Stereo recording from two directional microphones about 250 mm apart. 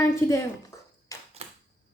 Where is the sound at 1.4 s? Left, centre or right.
Right.